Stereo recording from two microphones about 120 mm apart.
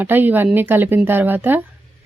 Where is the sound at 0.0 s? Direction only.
15° right (ahead or behind).